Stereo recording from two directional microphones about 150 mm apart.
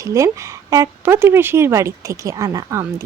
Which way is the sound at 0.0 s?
20° right (ahead or behind).